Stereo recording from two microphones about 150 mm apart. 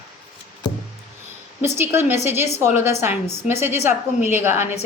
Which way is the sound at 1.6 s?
15° right (ahead or behind).